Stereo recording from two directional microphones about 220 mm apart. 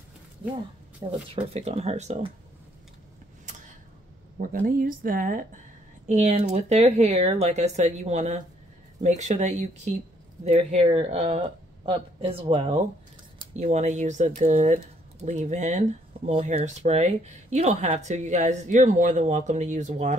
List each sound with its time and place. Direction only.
1.0 s speech: 20° right (ahead or behind)
4.4 s speech: 40° right (ahead or behind)